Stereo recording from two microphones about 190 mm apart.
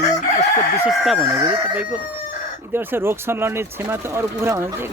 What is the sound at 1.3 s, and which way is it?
Speech, 25° right (ahead or behind).